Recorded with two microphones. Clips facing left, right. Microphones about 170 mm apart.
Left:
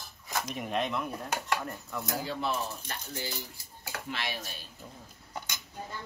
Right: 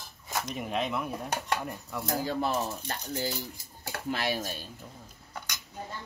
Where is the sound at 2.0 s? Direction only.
40° right (ahead or behind).